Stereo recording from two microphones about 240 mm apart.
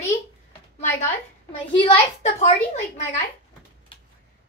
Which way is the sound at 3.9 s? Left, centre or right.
Left.